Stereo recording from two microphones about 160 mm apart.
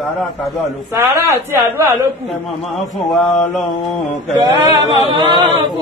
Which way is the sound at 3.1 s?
Centre (ahead or behind).